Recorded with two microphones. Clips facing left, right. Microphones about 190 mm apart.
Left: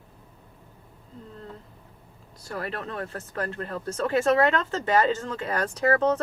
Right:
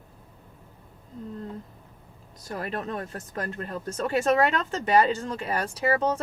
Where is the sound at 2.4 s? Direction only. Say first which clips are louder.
Right 1 dB; 20° right (ahead or behind).